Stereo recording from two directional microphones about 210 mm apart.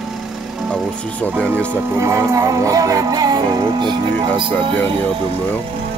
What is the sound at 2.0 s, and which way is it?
Music, 15° right (ahead or behind).